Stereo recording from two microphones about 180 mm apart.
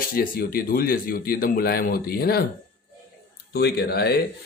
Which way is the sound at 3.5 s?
65° left (ahead or behind).